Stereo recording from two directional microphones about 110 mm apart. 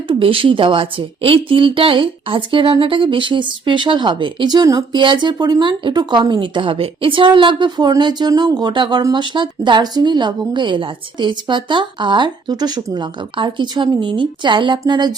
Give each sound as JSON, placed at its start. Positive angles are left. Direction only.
{"t": 0.1, "sound": "a woman's voice", "side_deg": -55}